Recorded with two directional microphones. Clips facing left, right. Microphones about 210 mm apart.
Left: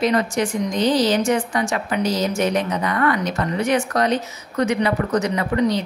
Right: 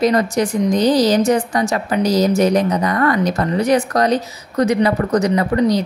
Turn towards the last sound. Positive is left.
turn(degrees=-40)  # may be behind; listen again after turning